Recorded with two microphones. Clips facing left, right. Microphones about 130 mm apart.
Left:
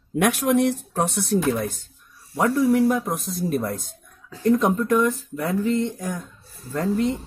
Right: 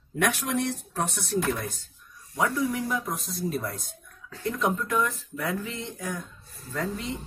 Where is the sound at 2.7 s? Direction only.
55° left (ahead or behind).